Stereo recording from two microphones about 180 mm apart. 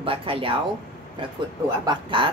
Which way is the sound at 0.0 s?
30° right (ahead or behind).